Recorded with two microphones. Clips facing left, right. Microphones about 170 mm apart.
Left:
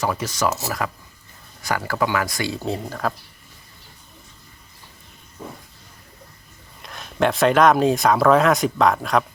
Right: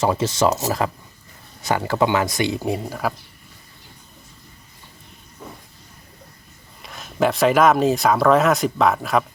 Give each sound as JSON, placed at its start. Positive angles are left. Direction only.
{"t": 0.0, "sound": "speech", "side_deg": -25}
{"t": 6.8, "sound": "speech", "side_deg": 0}